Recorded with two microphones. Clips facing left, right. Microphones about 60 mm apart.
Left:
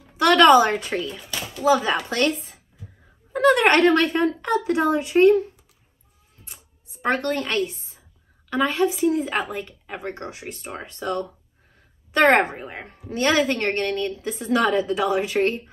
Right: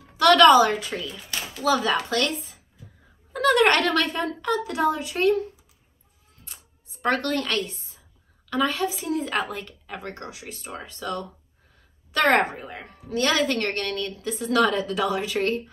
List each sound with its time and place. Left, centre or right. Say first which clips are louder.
0.2 s speech: left 1 dB; left
1.5 s a woman's voice: left 3 dB; left
3.3 s a woman's voice: left 3 dB; left
6.4 s a sound: left 1 dB; left
8.5 s a woman's voice: left 3 dB; left